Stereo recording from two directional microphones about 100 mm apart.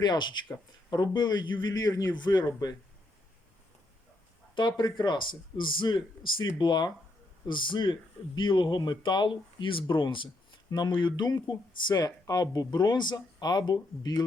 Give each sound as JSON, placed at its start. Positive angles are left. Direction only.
{"t": 0.0, "sound": "speech", "side_deg": 45}
{"t": 4.5, "sound": "speech", "side_deg": 50}
{"t": 10.7, "sound": "speech", "side_deg": 45}